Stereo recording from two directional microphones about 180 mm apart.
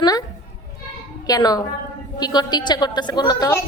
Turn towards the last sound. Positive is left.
turn(degrees=20)  # may be behind; listen again after turning